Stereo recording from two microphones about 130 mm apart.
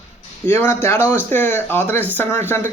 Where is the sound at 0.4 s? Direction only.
15° left (ahead or behind).